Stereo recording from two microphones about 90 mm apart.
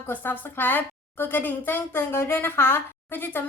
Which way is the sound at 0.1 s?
20° left (ahead or behind).